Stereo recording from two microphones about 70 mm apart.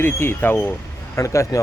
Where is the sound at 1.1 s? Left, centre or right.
Left.